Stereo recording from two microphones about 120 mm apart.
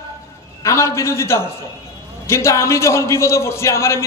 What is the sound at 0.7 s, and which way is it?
A man's voice, 25° left (ahead or behind).